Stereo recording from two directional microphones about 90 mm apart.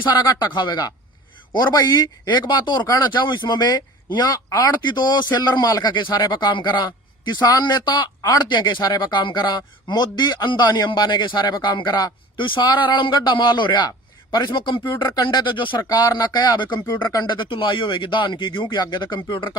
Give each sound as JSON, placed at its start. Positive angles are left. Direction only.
{"t": 0.0, "sound": "speech", "side_deg": 50}
{"t": 4.8, "sound": "speech", "side_deg": 55}
{"t": 15.9, "sound": "speech", "side_deg": 45}
{"t": 16.9, "sound": "speech", "side_deg": 45}